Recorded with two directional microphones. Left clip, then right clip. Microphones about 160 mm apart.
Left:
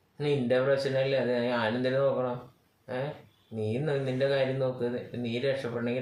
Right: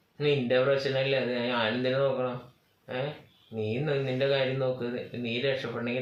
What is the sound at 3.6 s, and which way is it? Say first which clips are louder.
Speech: right 1 dB; 15° left (ahead or behind).